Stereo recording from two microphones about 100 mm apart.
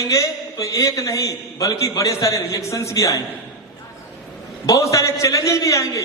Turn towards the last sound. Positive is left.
turn(degrees=30)  # may be behind; listen again after turning